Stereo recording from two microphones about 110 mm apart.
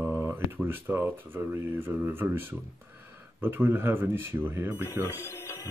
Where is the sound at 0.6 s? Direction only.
20° right (ahead or behind).